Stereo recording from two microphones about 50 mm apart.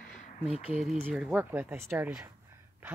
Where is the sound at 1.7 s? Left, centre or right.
Right.